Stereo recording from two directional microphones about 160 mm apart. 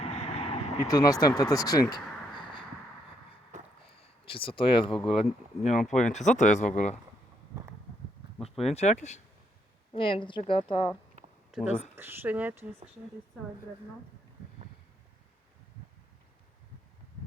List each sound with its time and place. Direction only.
0.0 s vehicle: 40° left (ahead or behind)
0.9 s speech: 25° left (ahead or behind)
2.3 s a sound: 30° left (ahead or behind)
3.8 s a sound: 35° left (ahead or behind)
5.0 s a woman's voice: 40° left (ahead or behind)
8.4 s speech: 40° left (ahead or behind)
9.9 s a woman's voice: 35° left (ahead or behind)
11.5 s speech: centre (ahead or behind)
11.9 s speech: 15° right (ahead or behind)